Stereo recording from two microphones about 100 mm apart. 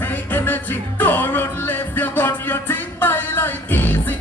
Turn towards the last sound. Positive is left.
turn(degrees=20)  # may be behind; listen again after turning